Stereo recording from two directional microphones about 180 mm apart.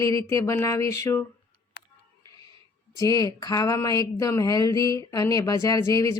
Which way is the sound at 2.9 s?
20° left (ahead or behind).